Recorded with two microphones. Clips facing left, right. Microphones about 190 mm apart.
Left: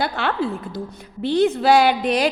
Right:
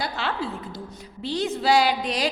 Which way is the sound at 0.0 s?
55° left (ahead or behind).